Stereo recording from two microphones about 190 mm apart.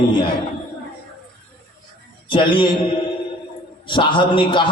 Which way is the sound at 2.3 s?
25° left (ahead or behind).